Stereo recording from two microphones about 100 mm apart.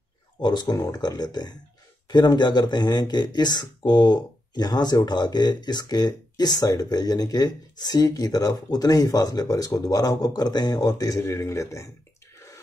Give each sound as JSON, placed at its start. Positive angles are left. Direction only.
{"t": 0.4, "sound": "speech", "side_deg": 45}